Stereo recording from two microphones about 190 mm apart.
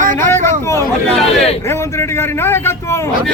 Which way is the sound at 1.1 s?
Centre (ahead or behind).